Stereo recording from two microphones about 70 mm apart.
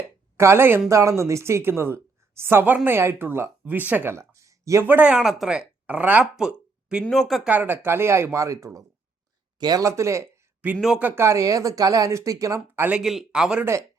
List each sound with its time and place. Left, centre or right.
0.3 s speech: right
0.9 s speech: right
3.6 s speech: right
4.1 s a sound: right
4.9 s speech: centre
6.3 s a sound: centre
7.1 s speech: centre
7.4 s speech: right
9.6 s speech: right
9.8 s speech: right
10.8 s speech: centre
11.0 s speech: right
13.0 s speech: centre